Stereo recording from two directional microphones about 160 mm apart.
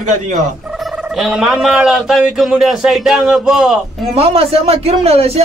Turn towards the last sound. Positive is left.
turn(degrees=-40)  # may be behind; listen again after turning